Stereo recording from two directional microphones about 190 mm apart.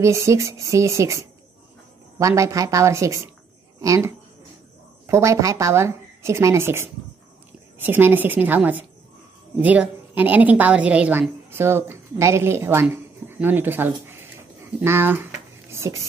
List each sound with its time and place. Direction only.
0.0 s a woman's voice: 15° right (ahead or behind)